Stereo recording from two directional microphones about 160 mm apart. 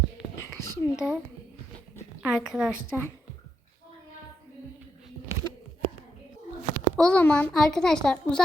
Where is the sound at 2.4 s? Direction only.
5° right (ahead or behind).